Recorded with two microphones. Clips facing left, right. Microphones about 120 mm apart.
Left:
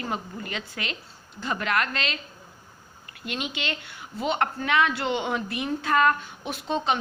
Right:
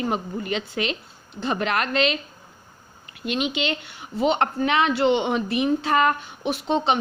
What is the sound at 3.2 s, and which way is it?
A woman's voice, 20° right (ahead or behind).